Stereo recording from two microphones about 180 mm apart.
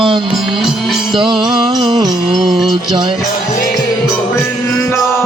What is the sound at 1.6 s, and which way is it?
Music, 25° right (ahead or behind).